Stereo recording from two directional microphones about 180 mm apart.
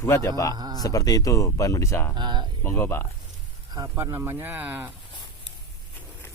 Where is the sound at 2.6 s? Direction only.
15° left (ahead or behind).